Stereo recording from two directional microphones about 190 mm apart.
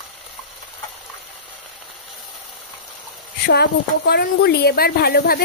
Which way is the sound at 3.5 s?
60° left (ahead or behind).